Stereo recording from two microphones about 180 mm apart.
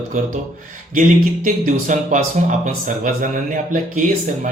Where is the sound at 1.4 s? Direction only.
45° right (ahead or behind).